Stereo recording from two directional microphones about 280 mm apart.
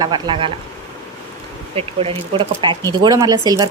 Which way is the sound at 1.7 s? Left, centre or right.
Right.